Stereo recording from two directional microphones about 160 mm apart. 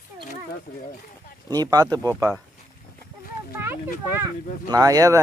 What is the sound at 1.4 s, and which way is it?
Speech, 25° right (ahead or behind).